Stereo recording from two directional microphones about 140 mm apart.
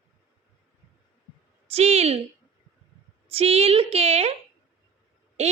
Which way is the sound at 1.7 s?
45° right (ahead or behind).